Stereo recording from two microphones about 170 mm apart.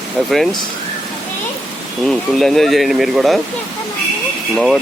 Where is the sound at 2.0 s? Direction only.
Centre (ahead or behind).